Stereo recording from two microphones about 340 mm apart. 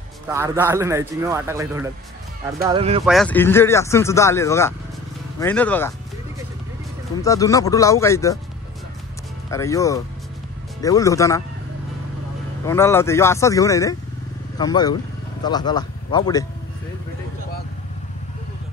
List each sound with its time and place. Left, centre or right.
0.3 s a man's voice: centre
3.1 s speech: centre
7.2 s speech: centre
9.5 s speech: centre
12.6 s speech: centre